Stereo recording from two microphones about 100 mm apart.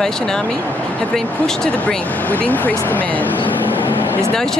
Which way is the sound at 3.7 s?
20° left (ahead or behind).